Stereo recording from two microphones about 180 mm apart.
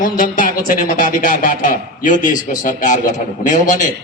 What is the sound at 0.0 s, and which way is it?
Speech, 50° left (ahead or behind).